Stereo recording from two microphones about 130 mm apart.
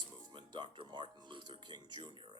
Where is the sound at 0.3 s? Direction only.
35° right (ahead or behind).